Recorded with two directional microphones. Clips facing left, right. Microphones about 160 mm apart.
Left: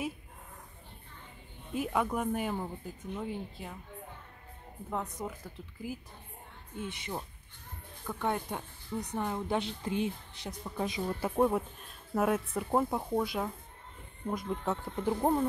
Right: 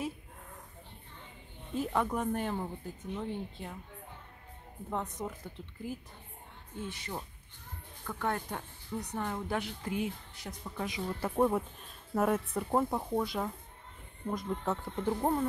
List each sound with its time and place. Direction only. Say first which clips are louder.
1.9 s speech: left 1 dB; 5° left (ahead or behind)
4.8 s speech: even; 5° left (ahead or behind)
6.8 s a woman's voice: left 1 dB; 20° left (ahead or behind)
11.1 s speech: even; 10° left (ahead or behind)